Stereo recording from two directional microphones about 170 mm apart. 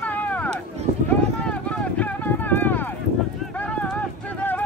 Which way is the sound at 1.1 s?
5° left (ahead or behind).